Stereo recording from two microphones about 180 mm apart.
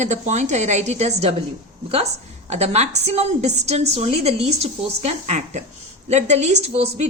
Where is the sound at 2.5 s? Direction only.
35° right (ahead or behind).